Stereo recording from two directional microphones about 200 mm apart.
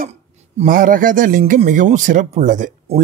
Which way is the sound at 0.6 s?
45° right (ahead or behind).